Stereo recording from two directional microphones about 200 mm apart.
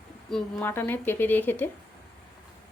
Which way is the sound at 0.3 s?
5° left (ahead or behind).